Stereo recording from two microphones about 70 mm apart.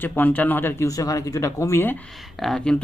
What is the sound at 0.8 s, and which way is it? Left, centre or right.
Speech, left.